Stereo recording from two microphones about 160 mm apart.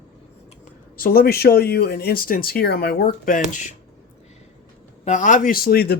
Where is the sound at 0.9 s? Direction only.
70° left (ahead or behind).